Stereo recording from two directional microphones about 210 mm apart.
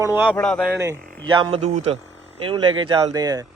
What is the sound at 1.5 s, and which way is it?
A man's voice, 30° right (ahead or behind).